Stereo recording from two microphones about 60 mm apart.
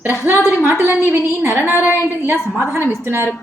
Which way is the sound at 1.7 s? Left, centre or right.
Left.